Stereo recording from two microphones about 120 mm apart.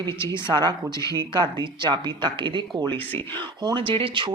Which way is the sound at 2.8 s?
15° left (ahead or behind).